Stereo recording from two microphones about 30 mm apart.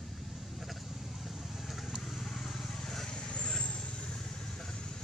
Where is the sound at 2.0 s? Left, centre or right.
Centre.